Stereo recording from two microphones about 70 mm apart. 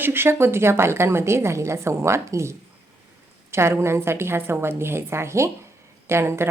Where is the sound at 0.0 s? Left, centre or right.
Right.